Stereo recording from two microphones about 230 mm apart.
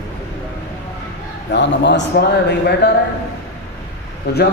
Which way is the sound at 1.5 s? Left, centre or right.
Left.